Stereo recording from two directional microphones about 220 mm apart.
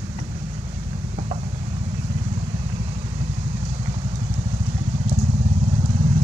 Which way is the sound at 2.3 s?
25° right (ahead or behind).